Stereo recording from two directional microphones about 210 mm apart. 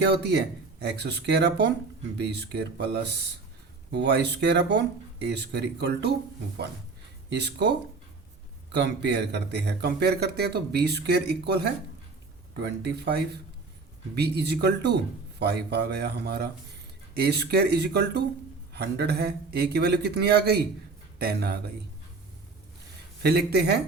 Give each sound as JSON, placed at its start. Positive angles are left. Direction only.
{"t": 0.1, "sound": "speech", "side_deg": -50}
{"t": 7.3, "sound": "speech", "side_deg": -50}
{"t": 8.8, "sound": "speech", "side_deg": -50}
{"t": 23.2, "sound": "speech", "side_deg": -50}